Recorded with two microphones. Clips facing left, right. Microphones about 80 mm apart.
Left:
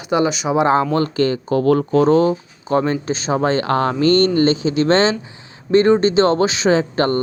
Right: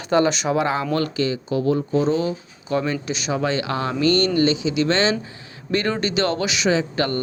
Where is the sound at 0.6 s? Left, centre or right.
Left.